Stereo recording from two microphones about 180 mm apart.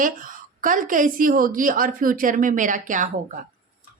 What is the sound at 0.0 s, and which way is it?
A woman's voice, 50° right (ahead or behind).